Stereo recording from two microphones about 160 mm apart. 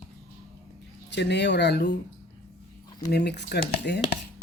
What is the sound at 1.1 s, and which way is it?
Speech, 90° left.